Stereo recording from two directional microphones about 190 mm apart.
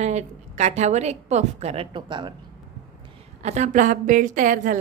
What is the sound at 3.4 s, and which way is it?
A woman's voice, 40° right (ahead or behind).